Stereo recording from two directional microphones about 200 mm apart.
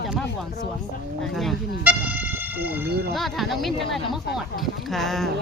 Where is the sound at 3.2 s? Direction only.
Centre (ahead or behind).